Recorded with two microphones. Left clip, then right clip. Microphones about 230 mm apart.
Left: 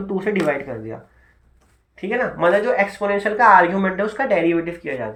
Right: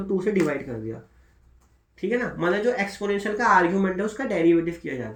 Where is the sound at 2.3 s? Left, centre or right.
Left.